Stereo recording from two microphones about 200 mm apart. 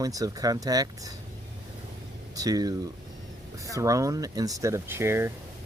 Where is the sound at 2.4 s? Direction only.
20° right (ahead or behind).